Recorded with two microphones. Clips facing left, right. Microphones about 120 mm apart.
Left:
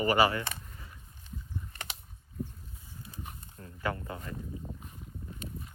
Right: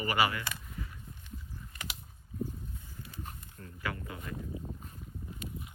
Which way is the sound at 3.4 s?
30° left (ahead or behind).